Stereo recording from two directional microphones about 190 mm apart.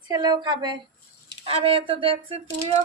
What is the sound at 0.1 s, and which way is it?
Speech, 20° right (ahead or behind).